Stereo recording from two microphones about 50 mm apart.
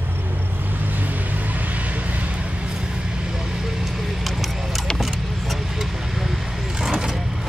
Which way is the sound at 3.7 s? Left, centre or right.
Centre.